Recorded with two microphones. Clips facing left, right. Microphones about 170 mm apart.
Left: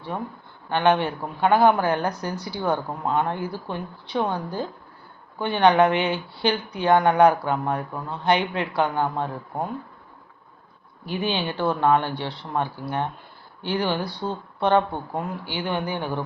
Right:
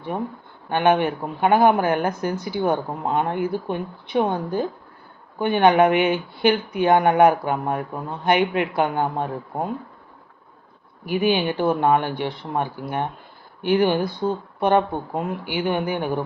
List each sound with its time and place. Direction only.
0.1 s speech: 35° right (ahead or behind)
0.7 s a woman's voice: 15° right (ahead or behind)
11.0 s a woman's voice: 10° right (ahead or behind)